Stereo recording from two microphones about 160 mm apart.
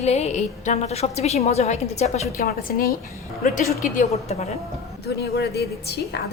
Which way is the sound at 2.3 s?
70° left (ahead or behind).